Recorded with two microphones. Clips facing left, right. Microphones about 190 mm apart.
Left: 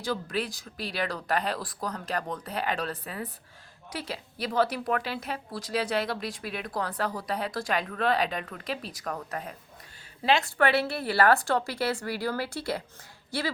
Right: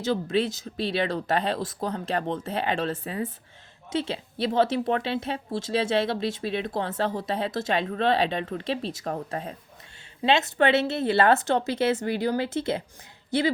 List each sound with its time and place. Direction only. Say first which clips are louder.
0.0 s a woman's voice: right 6 dB; 25° right (ahead or behind)